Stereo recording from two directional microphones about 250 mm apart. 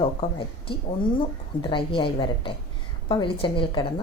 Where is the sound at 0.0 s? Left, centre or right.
Left.